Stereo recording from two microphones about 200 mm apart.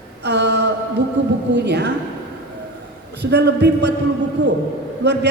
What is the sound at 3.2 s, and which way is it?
Mantra, 55° right (ahead or behind).